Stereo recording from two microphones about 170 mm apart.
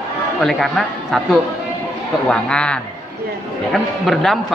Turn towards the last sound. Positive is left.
turn(degrees=5)  # may be behind; listen again after turning